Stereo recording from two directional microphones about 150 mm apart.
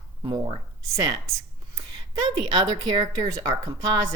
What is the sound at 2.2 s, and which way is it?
Speech, 30° right (ahead or behind).